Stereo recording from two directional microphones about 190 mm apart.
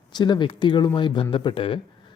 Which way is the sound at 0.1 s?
25° left (ahead or behind).